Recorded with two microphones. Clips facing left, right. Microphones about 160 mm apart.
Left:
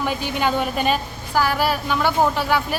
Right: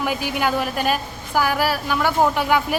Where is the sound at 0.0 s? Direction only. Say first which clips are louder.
Even; 10° right (ahead or behind).